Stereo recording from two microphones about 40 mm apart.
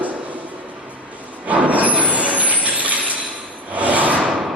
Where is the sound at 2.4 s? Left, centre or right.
Right.